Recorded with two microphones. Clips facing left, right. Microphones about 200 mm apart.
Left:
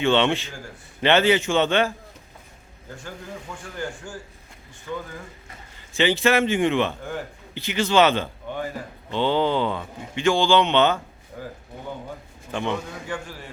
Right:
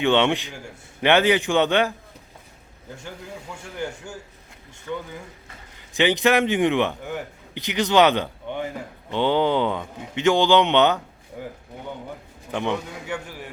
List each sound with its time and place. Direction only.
0.0 s a man's voice: 15° right (ahead or behind)
3.5 s a man's voice: 10° right (ahead or behind)
6.0 s a man's voice: 15° right (ahead or behind)
12.5 s a man's voice: 15° right (ahead or behind)